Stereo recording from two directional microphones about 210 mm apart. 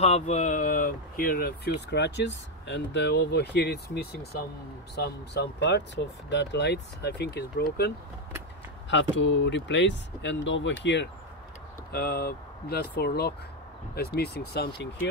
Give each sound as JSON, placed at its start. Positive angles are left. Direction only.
{"t": 0.0, "sound": "speech", "side_deg": 30}
{"t": 8.9, "sound": "speech", "side_deg": 60}